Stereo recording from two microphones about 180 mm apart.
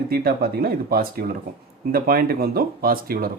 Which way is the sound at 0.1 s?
55° right (ahead or behind).